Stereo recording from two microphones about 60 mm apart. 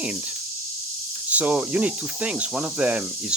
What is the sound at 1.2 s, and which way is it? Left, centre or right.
Speech, right.